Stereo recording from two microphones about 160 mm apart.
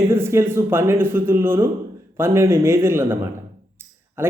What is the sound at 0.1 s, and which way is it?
Speech, 15° right (ahead or behind).